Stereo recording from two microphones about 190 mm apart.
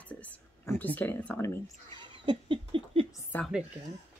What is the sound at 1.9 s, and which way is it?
Laughter, 25° right (ahead or behind).